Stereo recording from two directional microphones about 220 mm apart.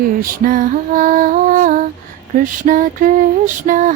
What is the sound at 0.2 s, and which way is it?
Music, 40° right (ahead or behind).